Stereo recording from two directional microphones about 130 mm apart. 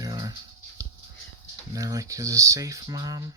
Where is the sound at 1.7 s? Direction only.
25° right (ahead or behind).